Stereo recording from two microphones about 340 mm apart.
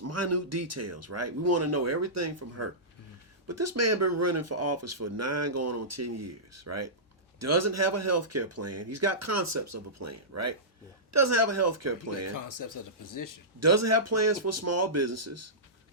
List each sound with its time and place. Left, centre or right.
0.0 s speech: right
12.3 s speech: left
13.6 s speech: right